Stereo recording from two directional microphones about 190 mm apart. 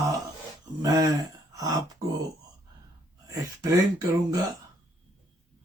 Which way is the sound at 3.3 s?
20° right (ahead or behind).